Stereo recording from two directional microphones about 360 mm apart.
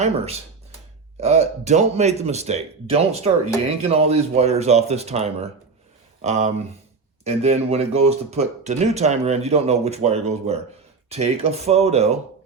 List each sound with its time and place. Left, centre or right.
0.0 s speech: centre